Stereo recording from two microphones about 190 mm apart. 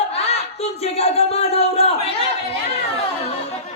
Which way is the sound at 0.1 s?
30° left (ahead or behind).